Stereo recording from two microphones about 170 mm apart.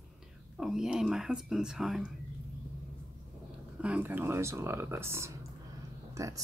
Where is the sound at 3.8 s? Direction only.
10° right (ahead or behind).